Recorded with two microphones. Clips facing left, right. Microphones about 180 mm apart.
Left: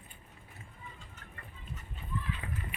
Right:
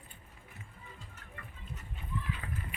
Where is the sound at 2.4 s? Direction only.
15° left (ahead or behind).